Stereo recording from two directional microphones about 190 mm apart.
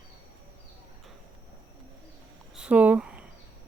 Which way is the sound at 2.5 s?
5° right (ahead or behind).